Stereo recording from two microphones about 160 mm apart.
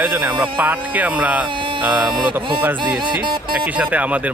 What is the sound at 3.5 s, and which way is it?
Speech, 10° right (ahead or behind).